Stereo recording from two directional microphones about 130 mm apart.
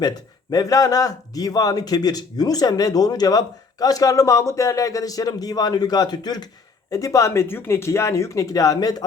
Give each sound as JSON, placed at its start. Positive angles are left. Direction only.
{"t": 0.0, "sound": "speech", "side_deg": 30}